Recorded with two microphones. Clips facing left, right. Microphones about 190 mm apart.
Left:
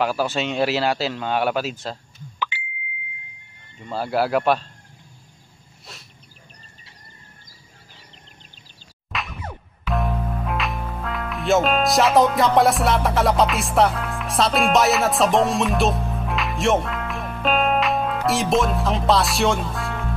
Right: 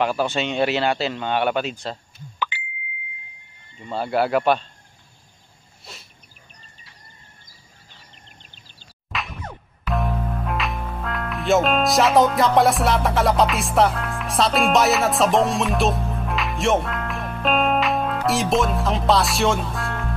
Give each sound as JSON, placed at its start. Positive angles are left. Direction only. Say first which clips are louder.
{"t": 0.0, "sound": "speech", "louder": "even", "side_deg": 0}
{"t": 2.3, "sound": "plop", "louder": "right 1 dB", "side_deg": -50}
{"t": 3.8, "sound": "speech", "louder": "right 1 dB", "side_deg": 0}
{"t": 5.9, "sound": "a sound", "louder": "right 1 dB", "side_deg": 0}
{"t": 9.1, "sound": "music", "louder": "even", "side_deg": 0}